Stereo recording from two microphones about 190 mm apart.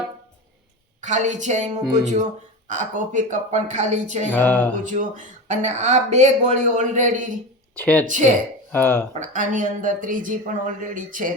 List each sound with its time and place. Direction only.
1.0 s speech: 40° right (ahead or behind)
4.3 s music: 10° left (ahead or behind)
4.8 s speech: 40° right (ahead or behind)
7.8 s music: 10° left (ahead or behind)
8.0 s a woman's voice: 40° right (ahead or behind)
8.7 s music: 10° left (ahead or behind)
9.1 s a woman's voice: 40° right (ahead or behind)